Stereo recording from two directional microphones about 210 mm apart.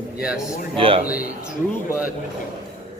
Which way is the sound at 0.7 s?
25° right (ahead or behind).